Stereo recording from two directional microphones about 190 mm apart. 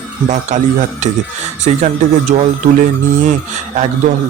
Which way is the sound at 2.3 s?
40° right (ahead or behind).